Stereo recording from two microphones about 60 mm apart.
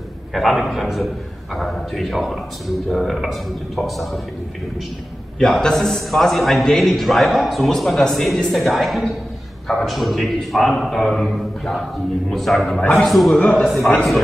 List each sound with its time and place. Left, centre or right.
0.3 s a man's voice: centre
5.4 s a man's voice: centre
13.4 s a man's voice: centre